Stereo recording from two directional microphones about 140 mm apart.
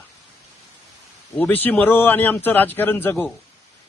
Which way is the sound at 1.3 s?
10° left (ahead or behind).